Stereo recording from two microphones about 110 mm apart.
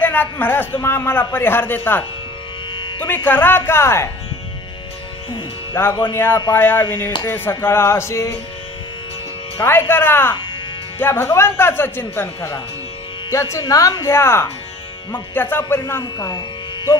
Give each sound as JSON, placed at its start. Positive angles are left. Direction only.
{"t": 0.0, "sound": "a man's voice", "side_deg": 15}
{"t": 5.8, "sound": "a man's voice", "side_deg": 20}
{"t": 9.6, "sound": "speech", "side_deg": 20}
{"t": 16.2, "sound": "music", "side_deg": 35}